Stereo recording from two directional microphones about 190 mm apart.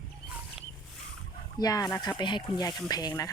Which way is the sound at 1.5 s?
20° left (ahead or behind).